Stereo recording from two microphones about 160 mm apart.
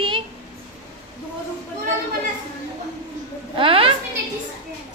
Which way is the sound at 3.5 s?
35° right (ahead or behind).